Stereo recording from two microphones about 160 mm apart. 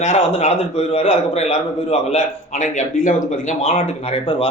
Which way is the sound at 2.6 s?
55° left (ahead or behind).